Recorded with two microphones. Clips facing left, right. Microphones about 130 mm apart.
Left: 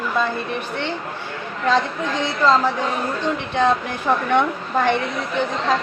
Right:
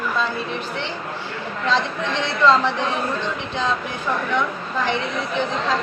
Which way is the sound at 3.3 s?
55° left (ahead or behind).